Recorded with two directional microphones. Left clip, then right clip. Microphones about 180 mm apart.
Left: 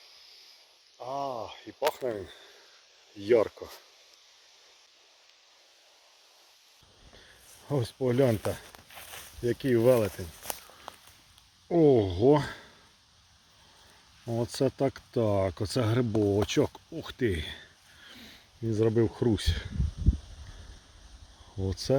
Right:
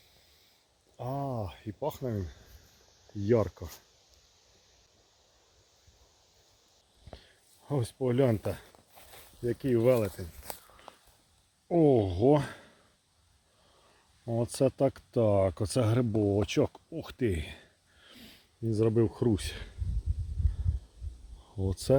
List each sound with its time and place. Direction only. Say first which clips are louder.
0.9 s a sound: left 2 dB; 5° left (ahead or behind)
3.2 s speech: left 4 dB; 35° left (ahead or behind)
7.7 s speech: left 2 dB; 10° right (ahead or behind)
9.4 s a sound: left 2 dB; centre (ahead or behind)
11.7 s speech: left 2 dB; 10° right (ahead or behind)
14.3 s speech: right 1 dB; 15° right (ahead or behind)
16.1 s speech: left 3 dB; 5° right (ahead or behind)
21.6 s speech: right 1 dB; 20° right (ahead or behind)